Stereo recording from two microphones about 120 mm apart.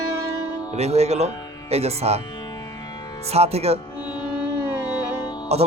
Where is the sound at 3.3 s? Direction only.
60° right (ahead or behind).